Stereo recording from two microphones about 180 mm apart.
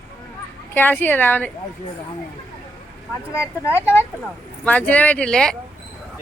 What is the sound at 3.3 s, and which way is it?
Speech, 15° left (ahead or behind).